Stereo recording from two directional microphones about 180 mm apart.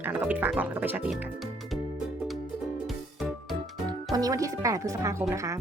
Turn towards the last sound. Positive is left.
turn(degrees=-15)  # may be behind; listen again after turning